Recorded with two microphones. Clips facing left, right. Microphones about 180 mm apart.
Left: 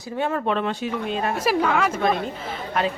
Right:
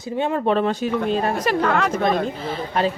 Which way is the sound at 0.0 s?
20° right (ahead or behind).